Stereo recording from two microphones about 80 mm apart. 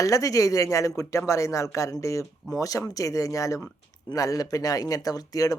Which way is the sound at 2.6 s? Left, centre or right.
Left.